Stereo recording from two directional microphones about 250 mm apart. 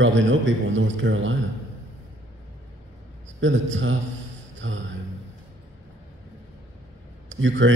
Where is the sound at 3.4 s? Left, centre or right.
Right.